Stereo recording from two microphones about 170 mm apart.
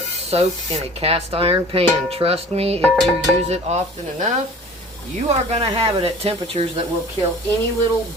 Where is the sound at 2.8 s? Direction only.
5° left (ahead or behind).